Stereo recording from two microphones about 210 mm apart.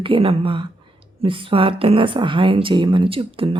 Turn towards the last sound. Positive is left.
turn(degrees=-25)  # may be behind; listen again after turning